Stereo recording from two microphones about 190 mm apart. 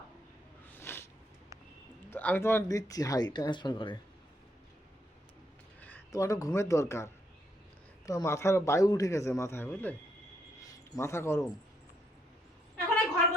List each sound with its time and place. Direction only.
0.8 s a sound: 15° left (ahead or behind)
2.0 s speech: 10° left (ahead or behind)
5.8 s a man's voice: 10° left (ahead or behind)